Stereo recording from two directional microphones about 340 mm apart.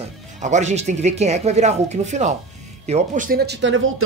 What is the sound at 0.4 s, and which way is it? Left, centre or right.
Speech, right.